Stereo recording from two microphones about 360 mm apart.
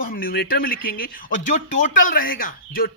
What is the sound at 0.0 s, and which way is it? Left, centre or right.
Speech, left.